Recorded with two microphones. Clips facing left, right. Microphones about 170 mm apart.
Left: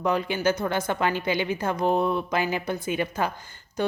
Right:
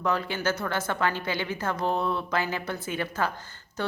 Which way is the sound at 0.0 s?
15° left (ahead or behind).